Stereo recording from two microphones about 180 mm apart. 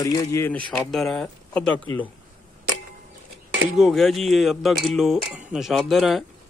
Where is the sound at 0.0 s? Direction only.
20° left (ahead or behind).